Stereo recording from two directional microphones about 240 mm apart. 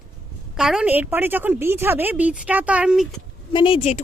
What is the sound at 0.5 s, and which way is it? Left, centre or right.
A woman's voice, centre.